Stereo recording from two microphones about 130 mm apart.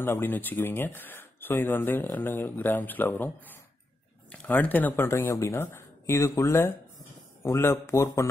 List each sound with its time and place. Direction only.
0.0 s speech: 15° left (ahead or behind)
4.3 s speech: 10° left (ahead or behind)